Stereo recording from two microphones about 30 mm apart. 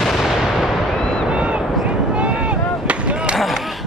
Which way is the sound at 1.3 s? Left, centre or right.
Right.